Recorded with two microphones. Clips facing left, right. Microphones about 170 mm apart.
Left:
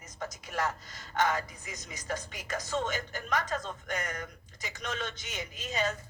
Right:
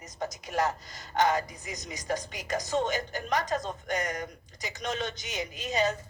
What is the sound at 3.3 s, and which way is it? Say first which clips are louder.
Speech: right 3 dB; 35° right (ahead or behind).